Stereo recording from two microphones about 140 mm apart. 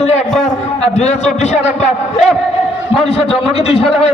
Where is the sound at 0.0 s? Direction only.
55° left (ahead or behind).